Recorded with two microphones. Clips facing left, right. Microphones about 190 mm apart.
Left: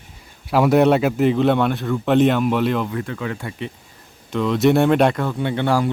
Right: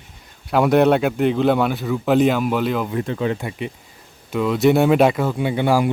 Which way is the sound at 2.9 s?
25° right (ahead or behind).